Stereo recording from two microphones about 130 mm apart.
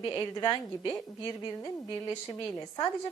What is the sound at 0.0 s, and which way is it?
A woman's voice, 30° left (ahead or behind).